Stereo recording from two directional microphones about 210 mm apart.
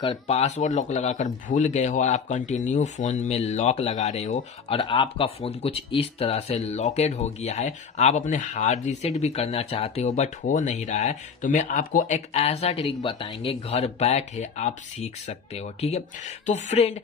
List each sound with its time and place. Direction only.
0.0 s speech: 30° left (ahead or behind)